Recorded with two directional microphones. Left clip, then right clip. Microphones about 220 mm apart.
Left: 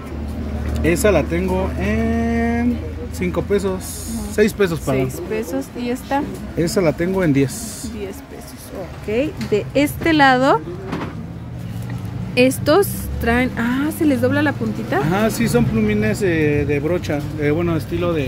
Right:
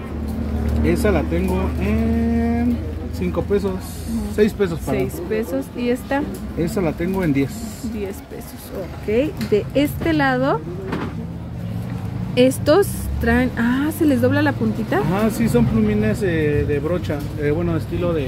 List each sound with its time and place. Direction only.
0.8 s speech: 50° left (ahead or behind)
1.9 s a sound: 50° left (ahead or behind)
3.2 s speech: 50° left (ahead or behind)
4.9 s speech: centre (ahead or behind)
6.6 s speech: 45° left (ahead or behind)
9.1 s speech: 5° left (ahead or behind)
12.4 s speech: 5° left (ahead or behind)
15.1 s speech: 45° left (ahead or behind)